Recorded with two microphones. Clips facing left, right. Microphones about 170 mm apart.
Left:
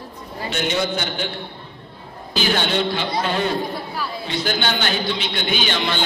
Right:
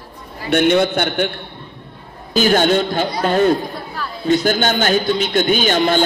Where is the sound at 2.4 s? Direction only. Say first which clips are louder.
Right 7 dB; 45° right (ahead or behind).